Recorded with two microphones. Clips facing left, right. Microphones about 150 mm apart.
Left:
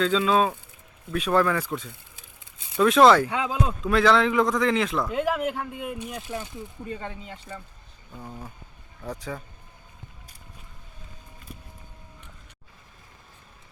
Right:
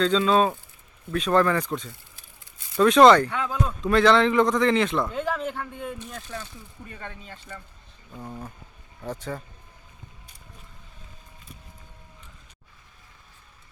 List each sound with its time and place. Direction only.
0.0 s a man's voice: 5° left (ahead or behind)
3.3 s speech: 20° left (ahead or behind)
3.8 s a man's voice: centre (ahead or behind)
8.1 s a man's voice: centre (ahead or behind)
11.5 s vehicle: 50° left (ahead or behind)